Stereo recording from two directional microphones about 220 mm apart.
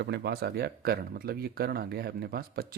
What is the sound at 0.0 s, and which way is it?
Speech, 50° right (ahead or behind).